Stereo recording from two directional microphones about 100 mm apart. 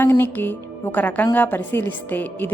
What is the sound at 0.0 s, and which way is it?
A woman's voice, 20° left (ahead or behind).